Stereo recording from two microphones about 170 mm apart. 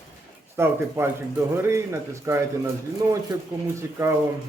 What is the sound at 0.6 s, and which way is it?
A man's voice, 15° right (ahead or behind).